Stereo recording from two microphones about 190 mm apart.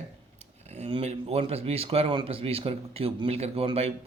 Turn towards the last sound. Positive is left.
turn(degrees=-30)  # may be behind; listen again after turning